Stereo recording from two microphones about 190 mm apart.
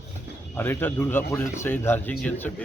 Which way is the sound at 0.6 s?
10° left (ahead or behind).